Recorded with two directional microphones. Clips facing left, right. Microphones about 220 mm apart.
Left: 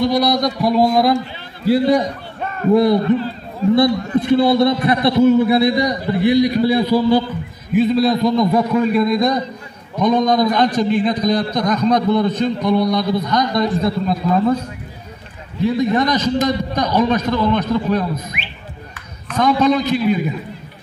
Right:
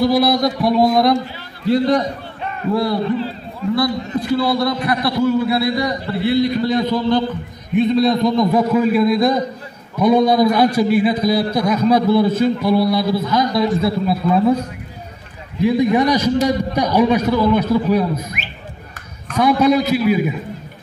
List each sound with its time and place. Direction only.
0.0 s a man's voice: 5° right (ahead or behind)
15.6 s a man's voice: 10° right (ahead or behind)
19.3 s a man's voice: 10° right (ahead or behind)